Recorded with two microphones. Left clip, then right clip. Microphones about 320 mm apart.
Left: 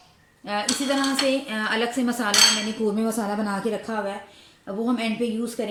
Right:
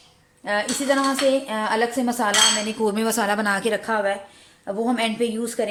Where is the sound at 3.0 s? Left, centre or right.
Right.